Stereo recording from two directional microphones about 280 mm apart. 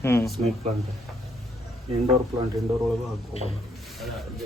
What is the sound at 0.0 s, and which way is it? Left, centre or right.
Speech, centre.